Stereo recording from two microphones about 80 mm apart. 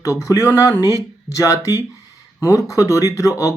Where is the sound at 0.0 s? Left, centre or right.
Left.